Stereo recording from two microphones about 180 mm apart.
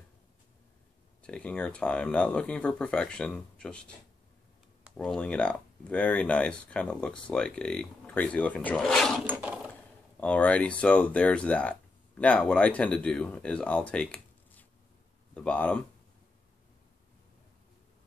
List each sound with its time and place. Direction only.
1.2 s speech: 5° left (ahead or behind)
4.9 s speech: 5° left (ahead or behind)
9.2 s sewing machine: 10° right (ahead or behind)
10.2 s speech: 5° left (ahead or behind)